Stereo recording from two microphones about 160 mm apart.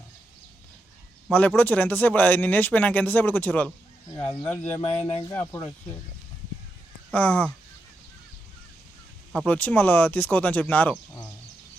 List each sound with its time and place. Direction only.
1.3 s speech: 10° left (ahead or behind)
4.7 s speech: 15° left (ahead or behind)
4.9 s speech: 40° left (ahead or behind)
5.3 s speech: 15° left (ahead or behind)
7.1 s speech: 10° left (ahead or behind)
9.3 s speech: 5° left (ahead or behind)